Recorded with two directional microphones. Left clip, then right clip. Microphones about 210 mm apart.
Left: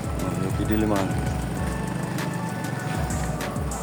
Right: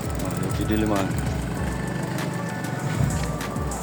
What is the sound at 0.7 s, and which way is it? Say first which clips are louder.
Speech: even; centre (ahead or behind).